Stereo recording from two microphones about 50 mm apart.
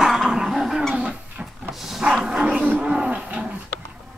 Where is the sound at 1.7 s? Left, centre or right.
Centre.